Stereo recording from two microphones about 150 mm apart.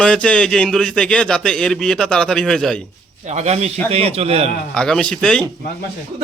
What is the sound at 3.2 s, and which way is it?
Speech, 50° right (ahead or behind).